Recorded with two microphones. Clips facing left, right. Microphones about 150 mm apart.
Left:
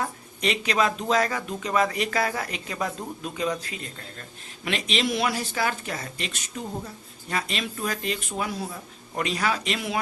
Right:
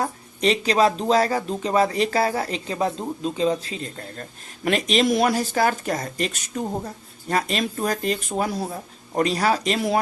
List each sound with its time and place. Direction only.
0.0 s speech: 35° right (ahead or behind)